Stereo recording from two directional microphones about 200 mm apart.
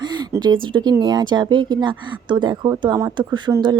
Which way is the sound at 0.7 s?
20° right (ahead or behind).